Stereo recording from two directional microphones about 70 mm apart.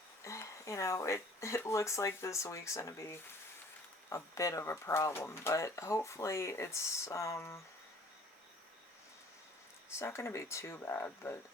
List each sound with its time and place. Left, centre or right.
0.3 s speech: left
10.0 s speech: left